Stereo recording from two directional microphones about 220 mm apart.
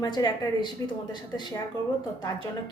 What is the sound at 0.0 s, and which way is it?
Speech, 20° left (ahead or behind).